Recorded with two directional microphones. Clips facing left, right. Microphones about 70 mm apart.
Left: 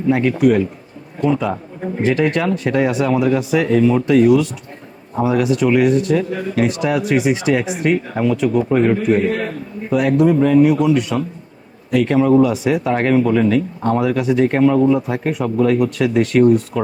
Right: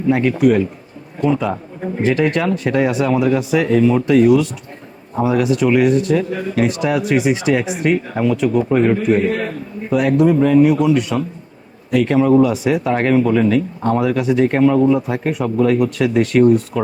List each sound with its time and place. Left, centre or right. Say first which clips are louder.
0.1 s speech: even; right